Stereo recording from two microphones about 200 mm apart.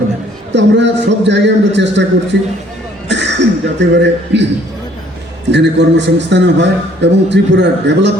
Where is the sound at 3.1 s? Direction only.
60° right (ahead or behind).